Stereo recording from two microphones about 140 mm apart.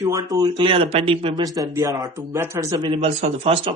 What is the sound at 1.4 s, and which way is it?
Speech, 25° right (ahead or behind).